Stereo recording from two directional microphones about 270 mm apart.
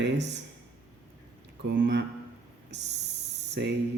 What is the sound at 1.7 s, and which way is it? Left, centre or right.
Speech, right.